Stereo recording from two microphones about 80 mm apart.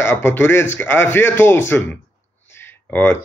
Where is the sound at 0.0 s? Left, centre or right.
Left.